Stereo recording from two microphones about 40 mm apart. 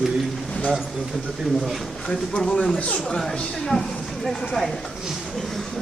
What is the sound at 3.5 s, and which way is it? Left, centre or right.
Speech, centre.